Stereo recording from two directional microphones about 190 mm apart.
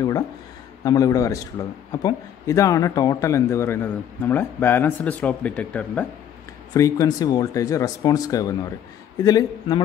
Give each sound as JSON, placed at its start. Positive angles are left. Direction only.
{"t": 0.8, "sound": "a man's voice", "side_deg": 20}
{"t": 6.7, "sound": "speech", "side_deg": 20}